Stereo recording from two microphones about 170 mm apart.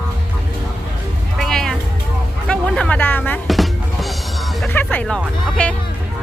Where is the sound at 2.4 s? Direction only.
5° left (ahead or behind).